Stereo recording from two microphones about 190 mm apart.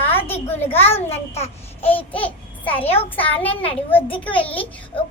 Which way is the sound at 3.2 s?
10° left (ahead or behind).